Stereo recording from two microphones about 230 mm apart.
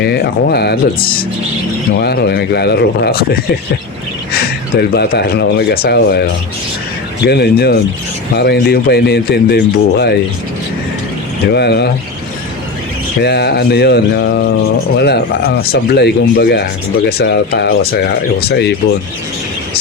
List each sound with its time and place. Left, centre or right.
0.0 s speech: left
7.3 s speech: left
11.5 s speech: left
13.2 s speech: left